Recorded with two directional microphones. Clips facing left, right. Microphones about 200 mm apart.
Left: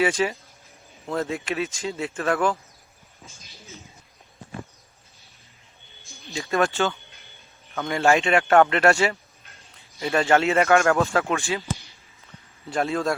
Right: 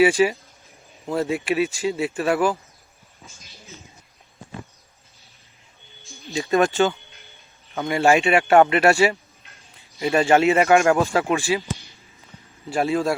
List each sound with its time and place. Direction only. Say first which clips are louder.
0.0 s speech: right 6 dB; 10° right (ahead or behind)
6.2 s speech: right 4 dB; 15° right (ahead or behind)
12.7 s speech: right 3 dB; 10° right (ahead or behind)